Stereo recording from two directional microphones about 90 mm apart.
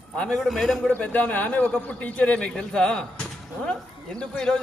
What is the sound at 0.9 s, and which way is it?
Speech, 20° left (ahead or behind).